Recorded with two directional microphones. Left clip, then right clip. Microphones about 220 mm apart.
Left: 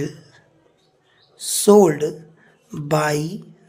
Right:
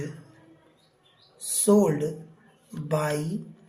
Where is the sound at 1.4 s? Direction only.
50° left (ahead or behind).